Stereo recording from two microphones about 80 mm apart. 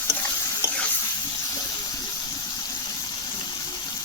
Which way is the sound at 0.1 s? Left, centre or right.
Left.